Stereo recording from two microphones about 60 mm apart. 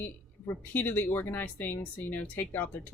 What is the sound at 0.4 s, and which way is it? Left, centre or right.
Speech, left.